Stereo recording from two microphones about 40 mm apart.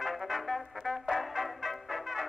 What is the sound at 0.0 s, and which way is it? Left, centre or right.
Brass instrument, centre.